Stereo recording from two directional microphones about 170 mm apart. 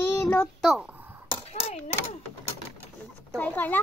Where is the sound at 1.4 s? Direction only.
35° left (ahead or behind).